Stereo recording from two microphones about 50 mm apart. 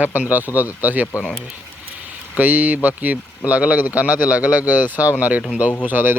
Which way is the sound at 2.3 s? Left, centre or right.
Right.